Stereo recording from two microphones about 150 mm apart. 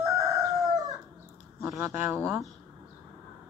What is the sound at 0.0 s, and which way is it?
Crowing, 20° right (ahead or behind).